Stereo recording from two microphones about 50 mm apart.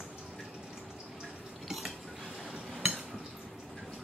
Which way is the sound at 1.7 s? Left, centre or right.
Centre.